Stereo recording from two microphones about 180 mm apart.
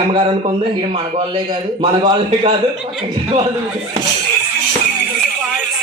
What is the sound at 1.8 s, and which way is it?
Speech, 25° right (ahead or behind).